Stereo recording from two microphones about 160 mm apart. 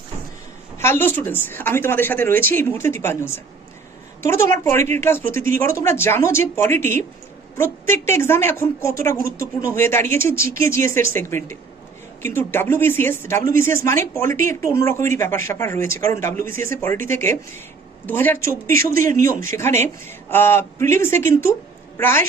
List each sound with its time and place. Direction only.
0.8 s a woman's voice: 15° left (ahead or behind)